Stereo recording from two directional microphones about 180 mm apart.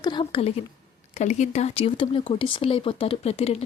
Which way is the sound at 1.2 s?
40° left (ahead or behind).